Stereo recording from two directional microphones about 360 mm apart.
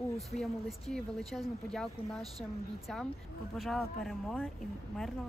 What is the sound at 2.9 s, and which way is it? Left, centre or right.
Speech, centre.